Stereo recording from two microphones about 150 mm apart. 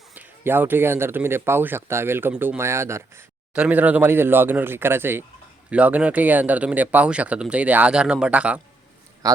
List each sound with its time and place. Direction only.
0.1 s speech: 15° right (ahead or behind)
9.2 s a man's voice: 25° right (ahead or behind)